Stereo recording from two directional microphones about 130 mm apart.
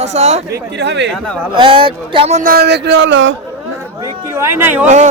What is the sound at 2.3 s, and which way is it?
Speech, 85° right.